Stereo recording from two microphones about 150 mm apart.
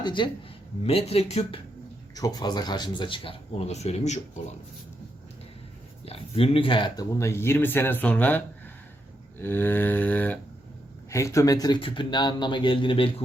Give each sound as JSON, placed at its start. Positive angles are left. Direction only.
{"t": 0.0, "sound": "speech", "side_deg": 30}
{"t": 0.9, "sound": "speech", "side_deg": 40}
{"t": 2.1, "sound": "speech", "side_deg": 25}
{"t": 6.1, "sound": "speech", "side_deg": 40}
{"t": 7.1, "sound": "speech", "side_deg": 20}